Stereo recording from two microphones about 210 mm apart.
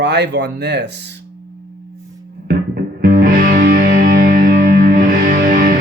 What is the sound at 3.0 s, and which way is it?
Music, 40° right (ahead or behind).